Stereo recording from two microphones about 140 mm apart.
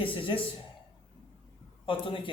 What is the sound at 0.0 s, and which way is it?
Speech, 40° left (ahead or behind).